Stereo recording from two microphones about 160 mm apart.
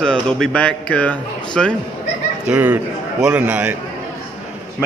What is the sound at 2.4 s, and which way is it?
A man's voice, 5° right (ahead or behind).